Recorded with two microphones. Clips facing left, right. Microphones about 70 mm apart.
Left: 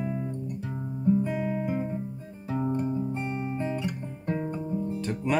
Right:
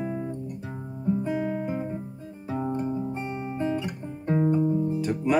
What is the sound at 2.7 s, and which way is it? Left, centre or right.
Music, centre.